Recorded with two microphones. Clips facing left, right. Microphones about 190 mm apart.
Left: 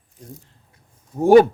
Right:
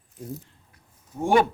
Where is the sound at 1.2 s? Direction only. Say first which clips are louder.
Left 9 dB; 40° left (ahead or behind).